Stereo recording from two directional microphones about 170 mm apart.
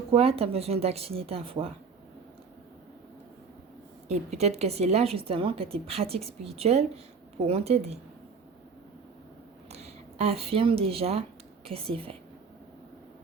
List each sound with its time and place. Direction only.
0.1 s a woman's voice: 35° right (ahead or behind)
4.1 s a woman's voice: 40° right (ahead or behind)
9.7 s a woman's voice: 40° right (ahead or behind)